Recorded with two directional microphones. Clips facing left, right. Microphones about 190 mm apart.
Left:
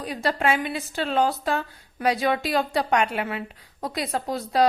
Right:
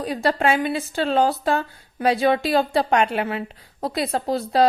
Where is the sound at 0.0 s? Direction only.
30° right (ahead or behind).